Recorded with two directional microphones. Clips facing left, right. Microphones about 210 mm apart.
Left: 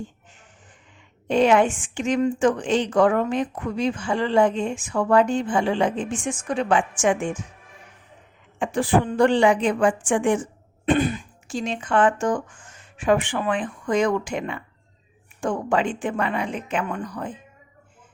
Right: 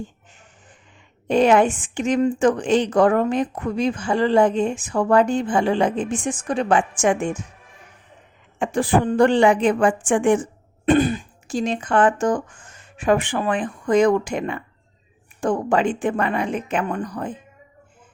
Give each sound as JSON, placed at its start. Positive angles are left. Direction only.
{"t": 1.3, "sound": "a woman's voice", "side_deg": -40}
{"t": 8.5, "sound": "speech", "side_deg": -45}
{"t": 10.8, "sound": "a woman's voice", "side_deg": -35}